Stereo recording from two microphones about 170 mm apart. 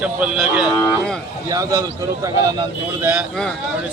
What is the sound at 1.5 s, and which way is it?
Speech, 20° right (ahead or behind).